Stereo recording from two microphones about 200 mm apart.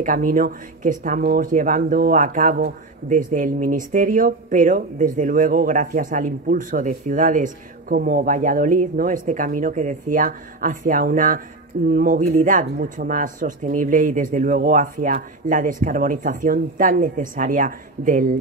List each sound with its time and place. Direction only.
0.0 s speech: 40° right (ahead or behind)